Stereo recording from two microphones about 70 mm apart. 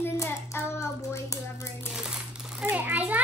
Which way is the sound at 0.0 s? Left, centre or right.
Left.